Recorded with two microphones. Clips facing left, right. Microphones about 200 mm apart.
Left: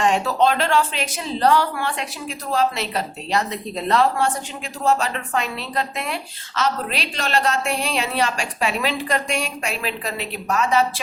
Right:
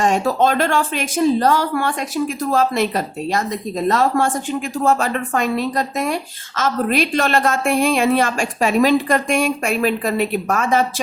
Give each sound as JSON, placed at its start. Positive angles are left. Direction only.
{"t": 0.0, "sound": "speech", "side_deg": -45}